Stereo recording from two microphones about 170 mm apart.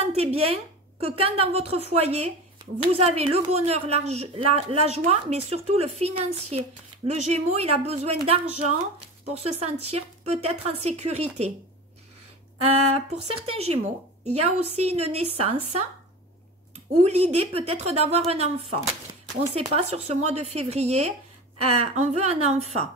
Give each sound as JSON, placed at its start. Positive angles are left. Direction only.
{"t": 0.0, "sound": "a woman's voice", "side_deg": -35}
{"t": 12.9, "sound": "a woman's voice", "side_deg": -40}
{"t": 17.0, "sound": "a woman's voice", "side_deg": -40}